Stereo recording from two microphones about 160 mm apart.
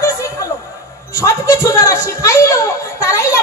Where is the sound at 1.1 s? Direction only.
20° left (ahead or behind).